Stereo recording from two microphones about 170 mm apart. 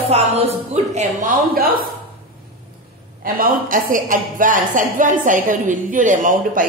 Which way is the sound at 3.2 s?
55° right (ahead or behind).